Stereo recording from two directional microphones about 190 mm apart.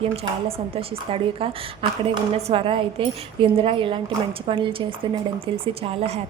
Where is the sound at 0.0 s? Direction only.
30° right (ahead or behind).